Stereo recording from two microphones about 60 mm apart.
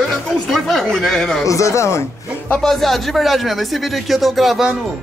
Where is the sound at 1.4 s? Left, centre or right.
Left.